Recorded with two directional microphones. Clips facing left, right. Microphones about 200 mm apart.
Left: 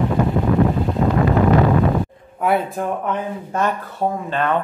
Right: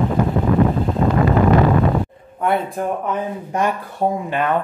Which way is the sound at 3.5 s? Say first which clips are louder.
Even; 15° right (ahead or behind).